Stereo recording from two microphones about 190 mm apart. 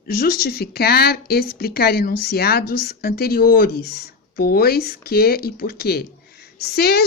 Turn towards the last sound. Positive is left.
turn(degrees=55)  # may be behind; listen again after turning